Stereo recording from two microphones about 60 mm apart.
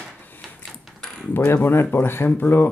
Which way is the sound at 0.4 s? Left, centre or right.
Centre.